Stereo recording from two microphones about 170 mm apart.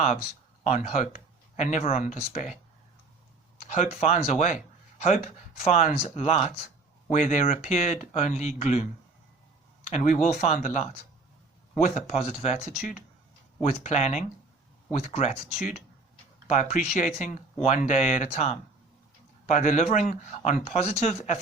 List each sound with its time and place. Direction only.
0.6 s speech: 45° left (ahead or behind)
3.7 s speech: 45° left (ahead or behind)
16.5 s speech: 45° left (ahead or behind)